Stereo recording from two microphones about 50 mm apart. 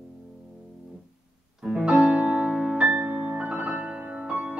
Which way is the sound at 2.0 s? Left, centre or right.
Right.